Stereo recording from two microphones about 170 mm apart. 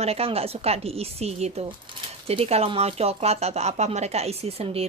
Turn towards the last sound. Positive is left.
turn(degrees=-35)  # may be behind; listen again after turning